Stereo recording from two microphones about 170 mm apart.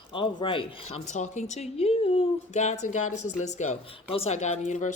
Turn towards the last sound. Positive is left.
turn(degrees=45)  # may be behind; listen again after turning